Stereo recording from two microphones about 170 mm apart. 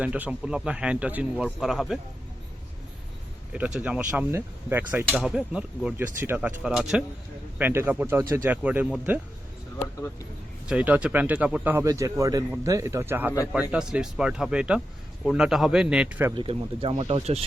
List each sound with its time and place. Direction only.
0.0 s speech: 10° right (ahead or behind)
3.5 s speech: 10° right (ahead or behind)
10.7 s speech: 10° right (ahead or behind)
16.3 s speech: 30° right (ahead or behind)